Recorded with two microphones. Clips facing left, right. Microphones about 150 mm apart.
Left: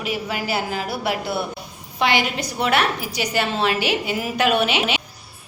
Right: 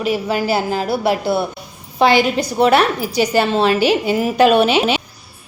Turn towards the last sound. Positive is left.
turn(degrees=-35)  # may be behind; listen again after turning